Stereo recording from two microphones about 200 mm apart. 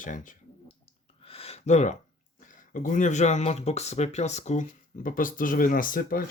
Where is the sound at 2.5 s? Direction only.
40° left (ahead or behind).